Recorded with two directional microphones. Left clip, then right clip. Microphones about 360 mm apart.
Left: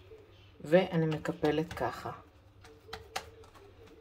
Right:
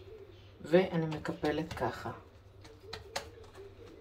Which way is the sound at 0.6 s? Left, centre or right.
Centre.